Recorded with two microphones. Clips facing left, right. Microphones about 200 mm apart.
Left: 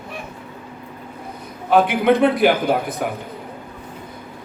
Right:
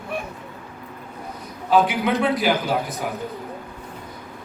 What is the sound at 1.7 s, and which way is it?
A man's voice, 55° left (ahead or behind).